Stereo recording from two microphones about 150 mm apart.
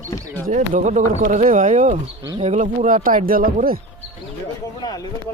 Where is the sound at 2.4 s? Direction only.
45° right (ahead or behind).